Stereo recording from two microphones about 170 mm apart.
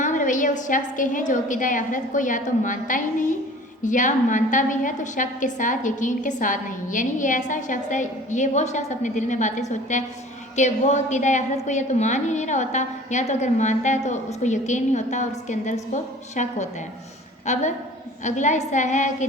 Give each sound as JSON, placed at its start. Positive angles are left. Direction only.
{"t": 0.0, "sound": "a woman's voice", "side_deg": 50}